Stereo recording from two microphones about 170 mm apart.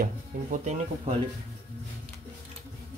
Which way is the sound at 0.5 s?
45° right (ahead or behind).